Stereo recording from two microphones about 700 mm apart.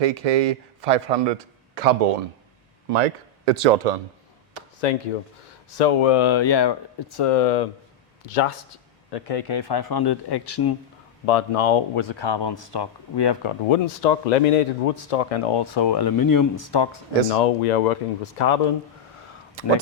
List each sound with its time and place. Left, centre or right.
0.0 s a man's voice: right
2.9 s speech: right
4.8 s speech: left
5.7 s speech: left
7.2 s speech: left
8.3 s speech: left
9.0 s speech: left
11.3 s speech: left
17.2 s speech: left